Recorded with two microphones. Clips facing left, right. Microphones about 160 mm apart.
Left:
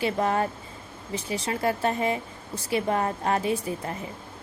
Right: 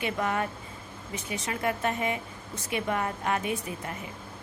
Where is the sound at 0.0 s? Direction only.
35° left (ahead or behind).